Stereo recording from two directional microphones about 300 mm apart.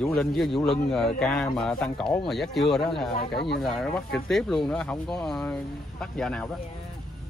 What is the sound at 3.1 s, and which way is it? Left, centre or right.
Speech, left.